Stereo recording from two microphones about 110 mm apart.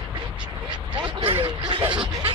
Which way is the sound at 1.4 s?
50° right (ahead or behind).